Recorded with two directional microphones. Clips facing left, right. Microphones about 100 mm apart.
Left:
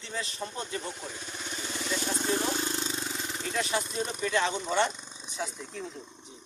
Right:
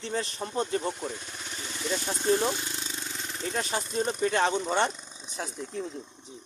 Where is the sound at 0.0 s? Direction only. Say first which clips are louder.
Right 4 dB; 45° right (ahead or behind).